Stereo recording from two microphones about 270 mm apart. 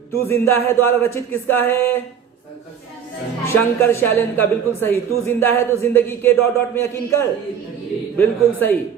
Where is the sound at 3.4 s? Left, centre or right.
Centre.